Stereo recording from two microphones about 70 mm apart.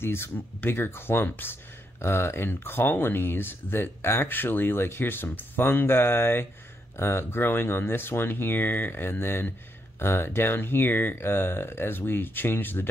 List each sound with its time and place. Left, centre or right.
0.0 s speech: left